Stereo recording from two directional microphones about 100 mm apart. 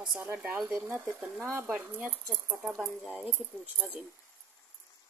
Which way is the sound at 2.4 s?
10° right (ahead or behind).